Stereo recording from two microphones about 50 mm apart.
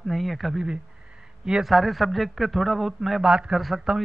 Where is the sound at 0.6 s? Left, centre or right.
Centre.